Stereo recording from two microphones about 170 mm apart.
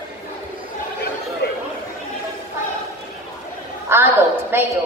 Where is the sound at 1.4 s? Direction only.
70° left (ahead or behind).